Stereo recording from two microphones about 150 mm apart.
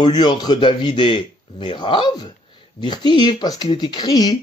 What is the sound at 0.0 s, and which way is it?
A man's voice, 30° left (ahead or behind).